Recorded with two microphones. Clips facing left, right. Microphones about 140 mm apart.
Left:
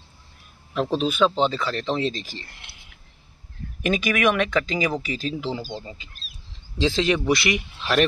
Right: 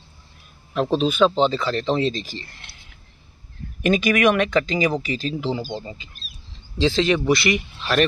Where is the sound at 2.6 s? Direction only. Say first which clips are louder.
Right 1 dB; 10° left (ahead or behind).